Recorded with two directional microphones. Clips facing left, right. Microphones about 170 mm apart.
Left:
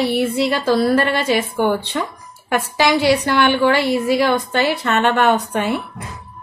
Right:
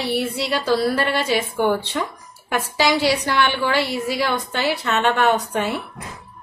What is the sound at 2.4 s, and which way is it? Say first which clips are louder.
A woman's voice: left 3 dB; 55° left (ahead or behind).